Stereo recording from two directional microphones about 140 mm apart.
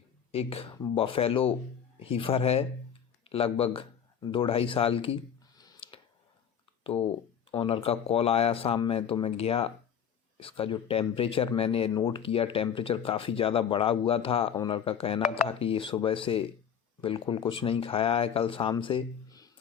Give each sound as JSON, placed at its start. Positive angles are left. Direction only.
{"t": 0.3, "sound": "speech", "side_deg": 45}
{"t": 5.8, "sound": "a sound", "side_deg": 40}
{"t": 6.8, "sound": "speech", "side_deg": 45}